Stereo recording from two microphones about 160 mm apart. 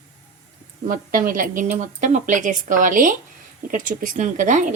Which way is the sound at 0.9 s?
60° right (ahead or behind).